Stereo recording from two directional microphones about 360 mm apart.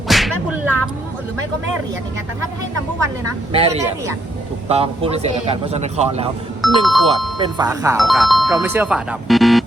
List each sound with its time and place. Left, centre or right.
0.1 s whip: centre
3.5 s a man's voice: centre
6.6 s speech: centre
7.3 s speech: centre